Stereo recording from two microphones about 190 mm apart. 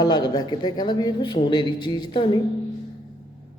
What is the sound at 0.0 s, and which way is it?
A man's voice, 20° left (ahead or behind).